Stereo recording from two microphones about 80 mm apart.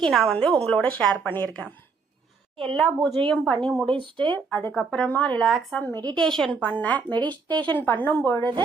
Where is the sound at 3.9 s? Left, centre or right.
Right.